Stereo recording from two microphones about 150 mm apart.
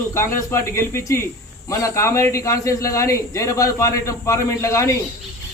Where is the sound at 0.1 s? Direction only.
20° left (ahead or behind).